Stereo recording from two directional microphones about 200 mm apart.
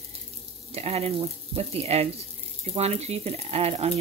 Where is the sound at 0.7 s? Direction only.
30° right (ahead or behind).